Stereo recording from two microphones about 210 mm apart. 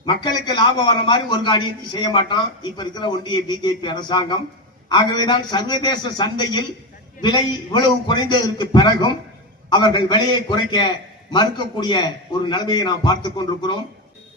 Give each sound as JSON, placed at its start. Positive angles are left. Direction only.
{"t": 0.0, "sound": "a man's voice", "side_deg": 20}